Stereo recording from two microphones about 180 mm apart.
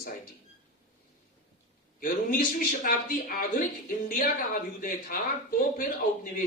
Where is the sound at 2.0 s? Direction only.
50° left (ahead or behind).